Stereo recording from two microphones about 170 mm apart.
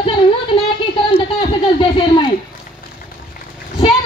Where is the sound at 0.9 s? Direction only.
30° left (ahead or behind).